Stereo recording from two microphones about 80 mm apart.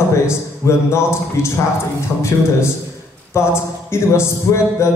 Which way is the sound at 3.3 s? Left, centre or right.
Left.